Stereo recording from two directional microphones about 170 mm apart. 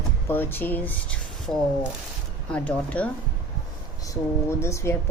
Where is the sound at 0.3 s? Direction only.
10° left (ahead or behind).